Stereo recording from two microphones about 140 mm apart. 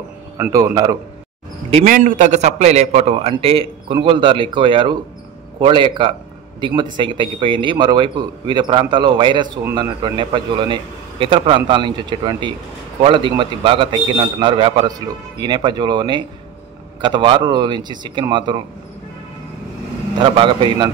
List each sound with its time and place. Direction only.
0.4 s speech: 25° right (ahead or behind)
1.9 s a man's voice: 70° right (ahead or behind); by 18.6 s 35° right (ahead or behind)
20.2 s speech: 35° right (ahead or behind)